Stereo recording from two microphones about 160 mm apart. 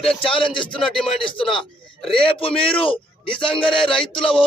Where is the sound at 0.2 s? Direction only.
35° left (ahead or behind).